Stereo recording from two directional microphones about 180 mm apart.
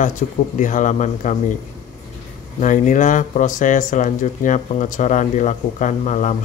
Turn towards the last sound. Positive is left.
turn(degrees=40)  # may be behind; listen again after turning